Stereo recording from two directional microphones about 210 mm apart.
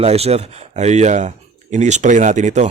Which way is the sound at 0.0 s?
30° right (ahead or behind).